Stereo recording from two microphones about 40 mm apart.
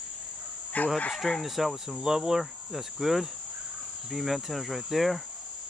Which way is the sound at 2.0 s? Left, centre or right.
Centre.